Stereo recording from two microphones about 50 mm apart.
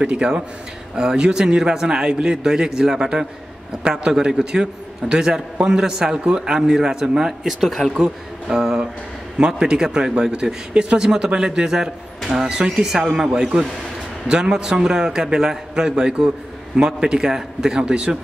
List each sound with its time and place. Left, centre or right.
0.0 s a man's voice: centre
7.9 s a man's voice: centre
12.2 s a sound: centre
12.7 s a man's voice: centre